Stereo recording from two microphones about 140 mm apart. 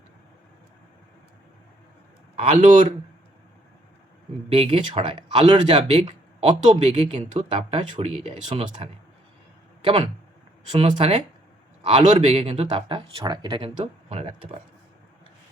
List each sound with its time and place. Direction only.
2.4 s speech: 40° right (ahead or behind)
4.4 s speech: 40° right (ahead or behind)
10.7 s a man's voice: 35° right (ahead or behind)
12.1 s speech: 50° right (ahead or behind)